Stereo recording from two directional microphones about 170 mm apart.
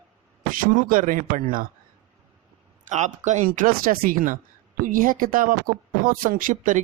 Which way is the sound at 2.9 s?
45° right (ahead or behind).